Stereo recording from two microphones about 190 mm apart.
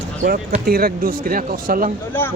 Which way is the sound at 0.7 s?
50° right (ahead or behind).